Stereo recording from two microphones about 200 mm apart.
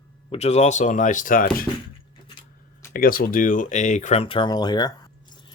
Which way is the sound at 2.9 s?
45° left (ahead or behind).